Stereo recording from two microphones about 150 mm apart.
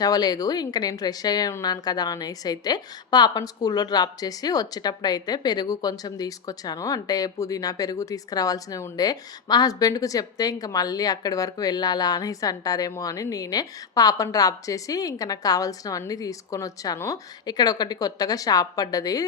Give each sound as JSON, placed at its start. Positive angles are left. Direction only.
{"t": 0.0, "sound": "speech", "side_deg": 25}